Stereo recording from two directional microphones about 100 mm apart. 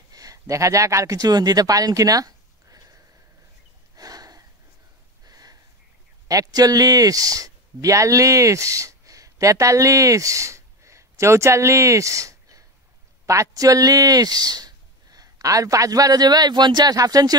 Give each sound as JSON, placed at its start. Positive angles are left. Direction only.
{"t": 0.1, "sound": "speech", "side_deg": -35}
{"t": 3.9, "sound": "a sound", "side_deg": -40}
{"t": 5.2, "sound": "sniff", "side_deg": -40}
{"t": 6.2, "sound": "speech", "side_deg": -35}